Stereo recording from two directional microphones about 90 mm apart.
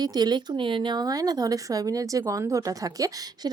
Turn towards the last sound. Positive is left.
turn(degrees=-40)  # may be behind; listen again after turning